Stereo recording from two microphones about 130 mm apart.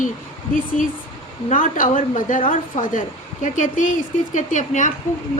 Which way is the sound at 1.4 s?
90° left.